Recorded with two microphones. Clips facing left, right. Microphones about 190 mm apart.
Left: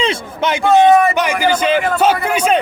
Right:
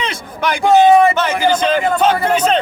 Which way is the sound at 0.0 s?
25° left (ahead or behind).